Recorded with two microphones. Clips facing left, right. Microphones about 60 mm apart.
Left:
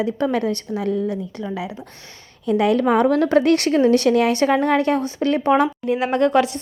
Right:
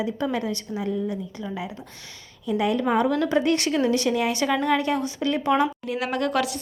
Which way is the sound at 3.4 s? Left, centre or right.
Left.